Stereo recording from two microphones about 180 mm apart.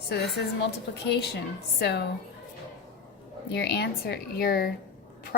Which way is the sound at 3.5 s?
65° left (ahead or behind).